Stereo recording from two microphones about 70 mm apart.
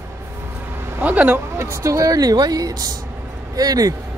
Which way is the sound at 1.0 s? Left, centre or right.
Right.